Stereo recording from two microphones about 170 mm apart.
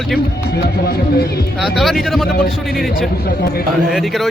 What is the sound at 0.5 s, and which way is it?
Speech, 65° left (ahead or behind).